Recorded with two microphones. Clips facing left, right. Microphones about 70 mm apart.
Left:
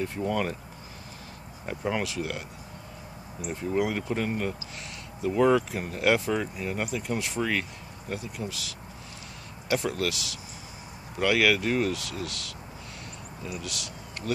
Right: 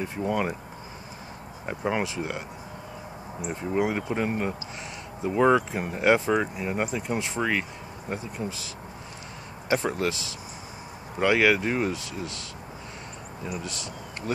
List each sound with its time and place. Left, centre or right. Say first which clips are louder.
0.0 s speech: right 1 dB; centre
1.7 s speech: right 2 dB; right